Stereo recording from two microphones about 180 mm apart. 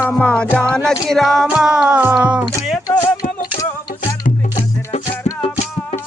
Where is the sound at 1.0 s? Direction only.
Centre (ahead or behind).